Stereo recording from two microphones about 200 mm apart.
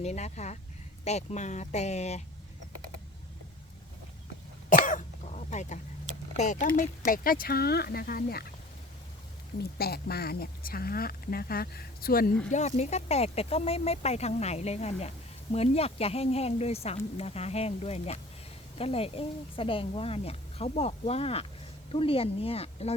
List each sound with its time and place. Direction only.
0.0 s speech: 35° left (ahead or behind)
4.7 s throat clearing: 40° left (ahead or behind)
6.3 s speech: 35° left (ahead or behind)
9.7 s speech: 50° left (ahead or behind)
12.5 s speech: 35° left (ahead or behind)